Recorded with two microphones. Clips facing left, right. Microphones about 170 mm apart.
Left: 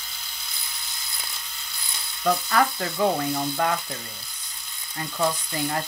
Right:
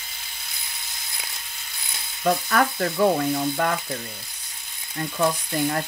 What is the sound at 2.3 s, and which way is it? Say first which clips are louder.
Speech: right 1 dB; 50° right (ahead or behind).